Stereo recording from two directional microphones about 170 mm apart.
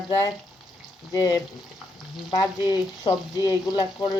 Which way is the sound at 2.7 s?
20° left (ahead or behind).